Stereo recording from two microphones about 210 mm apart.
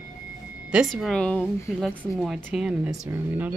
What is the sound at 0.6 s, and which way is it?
A woman's voice, 5° right (ahead or behind).